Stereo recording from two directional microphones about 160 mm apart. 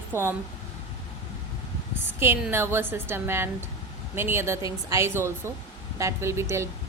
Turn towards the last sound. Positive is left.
turn(degrees=-15)  # may be behind; listen again after turning